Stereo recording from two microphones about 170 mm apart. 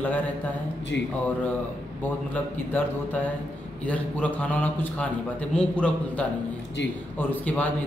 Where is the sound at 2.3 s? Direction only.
10° left (ahead or behind).